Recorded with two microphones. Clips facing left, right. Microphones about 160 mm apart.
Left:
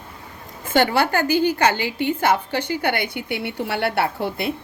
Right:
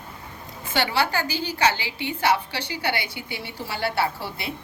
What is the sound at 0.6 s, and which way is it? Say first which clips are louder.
A woman's voice: left 6 dB; 50° left (ahead or behind).